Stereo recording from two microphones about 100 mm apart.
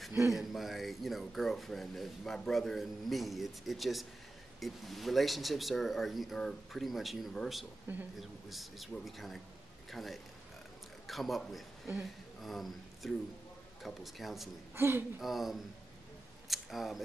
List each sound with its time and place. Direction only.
0.3 s speech: centre (ahead or behind)
7.9 s speech: 20° right (ahead or behind)
8.2 s a man's voice: centre (ahead or behind)
14.8 s speech: 25° right (ahead or behind)
15.1 s speech: centre (ahead or behind)
16.4 s camera: centre (ahead or behind)